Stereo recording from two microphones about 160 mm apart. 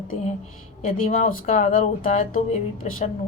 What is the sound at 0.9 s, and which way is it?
A woman's voice, 55° left (ahead or behind).